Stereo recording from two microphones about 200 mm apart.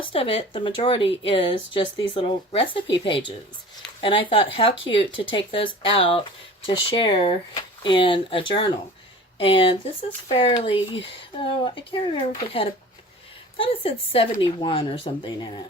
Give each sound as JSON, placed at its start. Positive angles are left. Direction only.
{"t": 0.1, "sound": "speech", "side_deg": 30}